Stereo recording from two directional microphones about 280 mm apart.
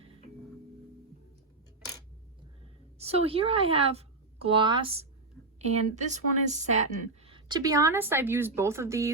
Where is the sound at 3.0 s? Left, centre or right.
Right.